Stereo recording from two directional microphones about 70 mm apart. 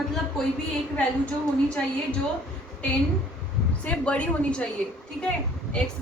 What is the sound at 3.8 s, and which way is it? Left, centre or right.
Speech, centre.